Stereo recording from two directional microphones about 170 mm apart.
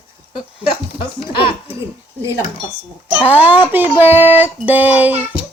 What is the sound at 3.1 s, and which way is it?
Child singing, 10° right (ahead or behind).